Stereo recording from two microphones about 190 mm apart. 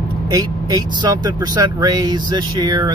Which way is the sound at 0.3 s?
20° right (ahead or behind).